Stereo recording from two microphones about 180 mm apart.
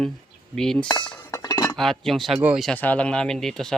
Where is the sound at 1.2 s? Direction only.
20° left (ahead or behind).